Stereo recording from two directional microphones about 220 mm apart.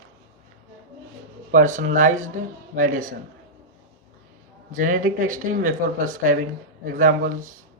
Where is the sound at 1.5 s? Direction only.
35° right (ahead or behind).